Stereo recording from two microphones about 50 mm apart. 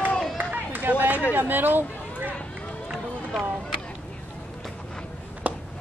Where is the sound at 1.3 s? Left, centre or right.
Right.